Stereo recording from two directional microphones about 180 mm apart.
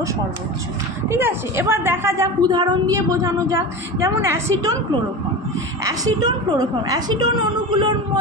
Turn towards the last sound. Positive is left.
turn(degrees=-25)  # may be behind; listen again after turning